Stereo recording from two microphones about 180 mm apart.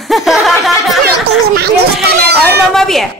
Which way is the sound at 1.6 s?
65° right (ahead or behind).